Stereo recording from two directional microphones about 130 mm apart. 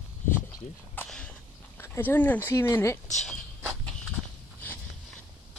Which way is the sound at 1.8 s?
15° left (ahead or behind).